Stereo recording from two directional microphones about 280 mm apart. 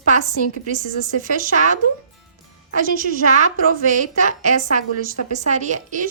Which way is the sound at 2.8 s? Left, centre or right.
Right.